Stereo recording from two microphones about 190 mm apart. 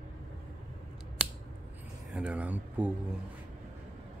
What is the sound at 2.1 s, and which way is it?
Speech, 5° right (ahead or behind).